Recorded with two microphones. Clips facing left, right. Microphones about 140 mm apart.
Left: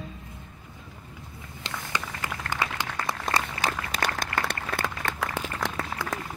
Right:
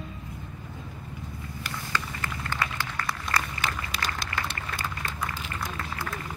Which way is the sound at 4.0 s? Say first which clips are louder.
Left 5 dB; 55° left (ahead or behind).